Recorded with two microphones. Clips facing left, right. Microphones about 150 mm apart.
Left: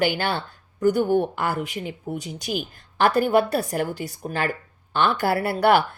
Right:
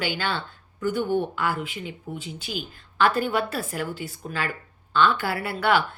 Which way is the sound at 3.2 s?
40° left (ahead or behind).